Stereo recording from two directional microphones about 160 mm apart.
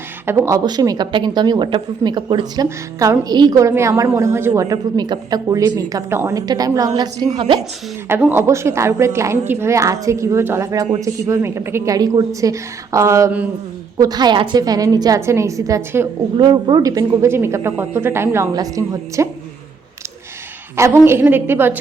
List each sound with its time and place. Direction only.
0.3 s a woman's voice: 20° right (ahead or behind)
8.0 s a woman's voice: 15° right (ahead or behind)
14.0 s speech: 25° right (ahead or behind)
16.4 s speech: 30° right (ahead or behind)
20.7 s a woman's voice: 15° right (ahead or behind)